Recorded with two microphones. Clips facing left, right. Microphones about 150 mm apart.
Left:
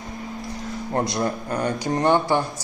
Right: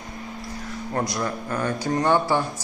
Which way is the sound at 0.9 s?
25° left (ahead or behind).